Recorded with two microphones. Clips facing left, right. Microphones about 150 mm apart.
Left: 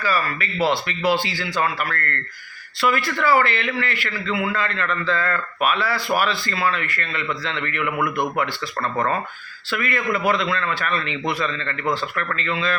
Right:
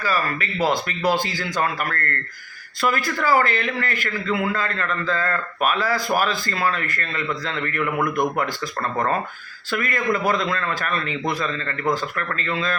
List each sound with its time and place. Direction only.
0.0 s a man's voice: 40° right (ahead or behind)
9.6 s speech: 40° right (ahead or behind)